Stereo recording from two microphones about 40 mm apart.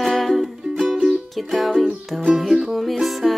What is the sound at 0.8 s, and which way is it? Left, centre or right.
Music, centre.